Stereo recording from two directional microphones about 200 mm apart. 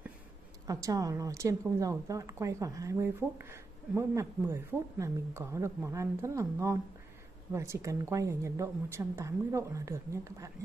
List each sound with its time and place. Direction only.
0.7 s speech: 15° right (ahead or behind)